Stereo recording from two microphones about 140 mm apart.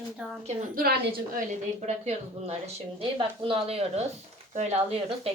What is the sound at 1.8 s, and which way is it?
Speech, 50° right (ahead or behind).